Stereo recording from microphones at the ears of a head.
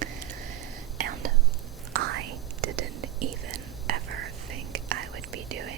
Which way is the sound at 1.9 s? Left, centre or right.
Right.